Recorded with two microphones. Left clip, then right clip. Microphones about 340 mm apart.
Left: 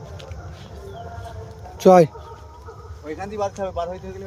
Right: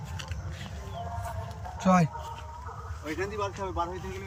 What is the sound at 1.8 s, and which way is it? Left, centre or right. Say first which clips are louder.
Speech: left 13 dB; centre.